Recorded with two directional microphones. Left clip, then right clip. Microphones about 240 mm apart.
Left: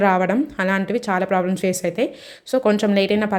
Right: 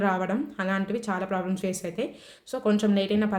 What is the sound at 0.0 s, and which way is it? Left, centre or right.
Speech, left.